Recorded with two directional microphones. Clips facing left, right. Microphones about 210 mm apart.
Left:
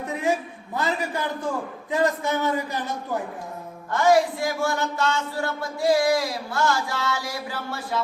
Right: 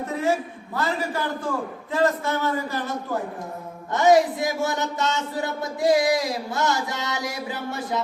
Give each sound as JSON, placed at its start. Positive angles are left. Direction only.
{"t": 0.8, "sound": "a man's voice", "side_deg": 15}
{"t": 3.9, "sound": "speech", "side_deg": -20}